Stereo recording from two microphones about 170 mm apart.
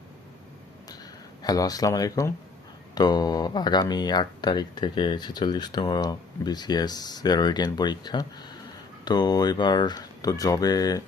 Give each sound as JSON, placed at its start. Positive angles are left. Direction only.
{"t": 1.4, "sound": "speech", "side_deg": 20}